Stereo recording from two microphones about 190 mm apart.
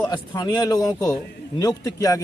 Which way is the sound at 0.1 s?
20° left (ahead or behind).